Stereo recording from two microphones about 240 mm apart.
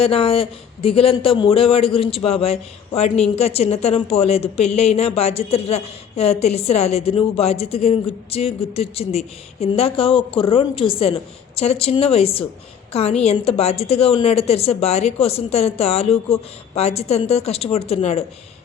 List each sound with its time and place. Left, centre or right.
0.0 s speech: left